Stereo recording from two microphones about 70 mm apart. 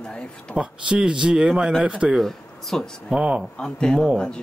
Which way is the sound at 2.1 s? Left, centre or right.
Centre.